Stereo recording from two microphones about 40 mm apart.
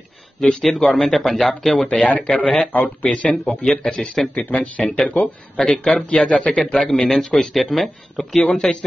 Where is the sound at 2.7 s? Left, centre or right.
Left.